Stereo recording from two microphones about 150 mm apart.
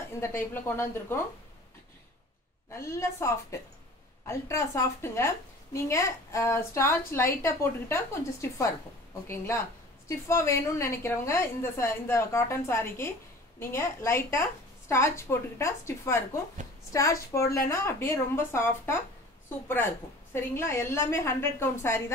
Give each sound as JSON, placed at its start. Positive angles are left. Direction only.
{"t": 0.4, "sound": "a woman's voice", "side_deg": 15}
{"t": 2.7, "sound": "a woman's voice", "side_deg": 20}
{"t": 10.0, "sound": "a woman's voice", "side_deg": 20}
{"t": 20.3, "sound": "a woman's voice", "side_deg": 15}